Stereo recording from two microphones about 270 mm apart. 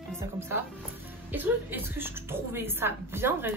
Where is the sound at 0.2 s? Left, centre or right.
Centre.